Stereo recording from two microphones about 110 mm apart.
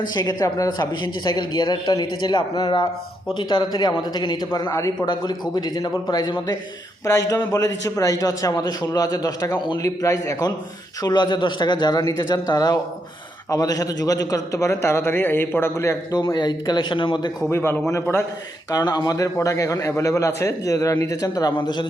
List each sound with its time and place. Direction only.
0.1 s a man's voice: 40° left (ahead or behind)
11.0 s a man's voice: 40° left (ahead or behind)
17.5 s a man's voice: 25° left (ahead or behind)
18.7 s a man's voice: 35° left (ahead or behind)